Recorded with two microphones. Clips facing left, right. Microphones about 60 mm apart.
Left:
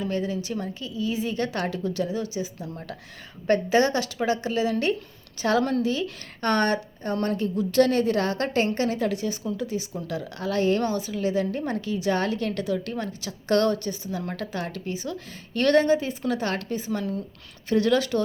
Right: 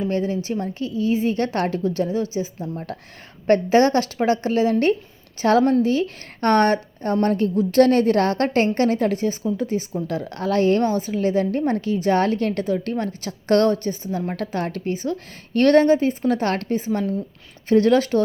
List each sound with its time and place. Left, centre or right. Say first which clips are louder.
0.0 s a woman's voice: right 5 dB; right